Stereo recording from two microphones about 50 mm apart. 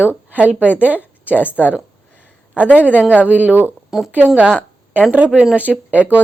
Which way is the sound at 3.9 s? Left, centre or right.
Centre.